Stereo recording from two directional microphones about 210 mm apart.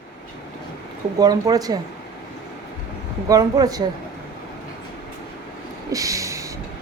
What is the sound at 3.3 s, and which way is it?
Speech, 15° right (ahead or behind).